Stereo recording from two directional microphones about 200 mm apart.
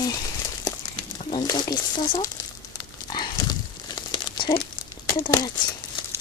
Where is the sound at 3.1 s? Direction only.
20° left (ahead or behind).